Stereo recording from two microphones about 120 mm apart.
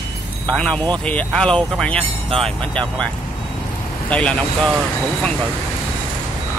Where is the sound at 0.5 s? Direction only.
5° left (ahead or behind).